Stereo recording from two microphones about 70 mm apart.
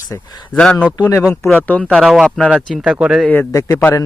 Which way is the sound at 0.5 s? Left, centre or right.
Centre.